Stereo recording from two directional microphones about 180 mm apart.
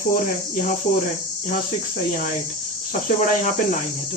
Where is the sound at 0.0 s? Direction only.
50° left (ahead or behind).